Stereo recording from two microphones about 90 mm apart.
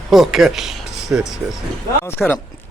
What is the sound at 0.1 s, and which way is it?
Speech, centre (ahead or behind).